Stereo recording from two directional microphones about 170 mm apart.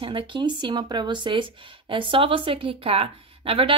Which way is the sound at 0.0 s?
30° right (ahead or behind).